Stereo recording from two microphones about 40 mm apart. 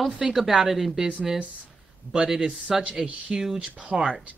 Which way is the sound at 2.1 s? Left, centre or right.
Right.